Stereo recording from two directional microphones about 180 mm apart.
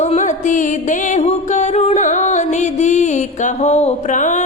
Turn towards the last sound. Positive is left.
turn(degrees=45)  # may be behind; listen again after turning